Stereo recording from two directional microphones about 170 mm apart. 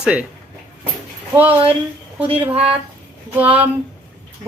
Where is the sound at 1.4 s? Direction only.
10° right (ahead or behind).